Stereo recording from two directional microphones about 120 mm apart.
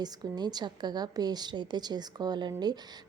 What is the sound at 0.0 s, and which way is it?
A woman's voice, 35° right (ahead or behind).